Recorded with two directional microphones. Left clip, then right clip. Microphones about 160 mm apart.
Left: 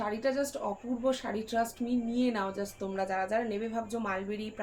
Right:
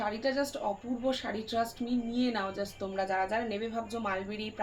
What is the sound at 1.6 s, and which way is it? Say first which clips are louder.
A woman's voice: left 1 dB; 40° left (ahead or behind).